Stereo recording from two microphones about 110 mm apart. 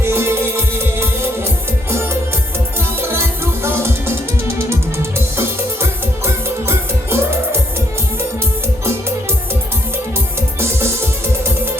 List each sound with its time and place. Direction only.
0.0 s music: 25° right (ahead or behind)
3.6 s music: 20° right (ahead or behind)